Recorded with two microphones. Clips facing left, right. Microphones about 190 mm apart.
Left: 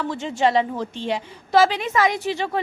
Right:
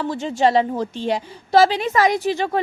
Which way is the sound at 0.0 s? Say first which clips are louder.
Right 2 dB; 35° right (ahead or behind).